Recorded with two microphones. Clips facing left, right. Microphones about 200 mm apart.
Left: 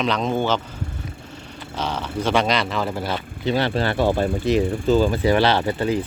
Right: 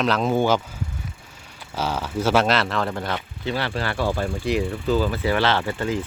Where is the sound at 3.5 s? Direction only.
20° left (ahead or behind).